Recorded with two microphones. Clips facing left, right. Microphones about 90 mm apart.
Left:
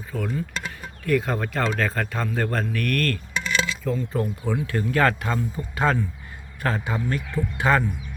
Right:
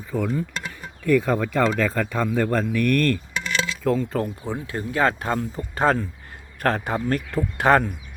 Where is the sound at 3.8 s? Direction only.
90° right.